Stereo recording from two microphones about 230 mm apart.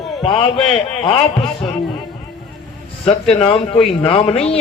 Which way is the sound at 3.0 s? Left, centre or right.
Left.